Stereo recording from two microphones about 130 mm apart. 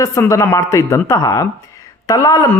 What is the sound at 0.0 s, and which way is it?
A man's voice, 20° left (ahead or behind).